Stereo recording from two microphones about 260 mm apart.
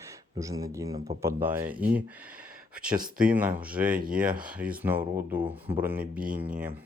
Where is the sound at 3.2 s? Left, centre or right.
Centre.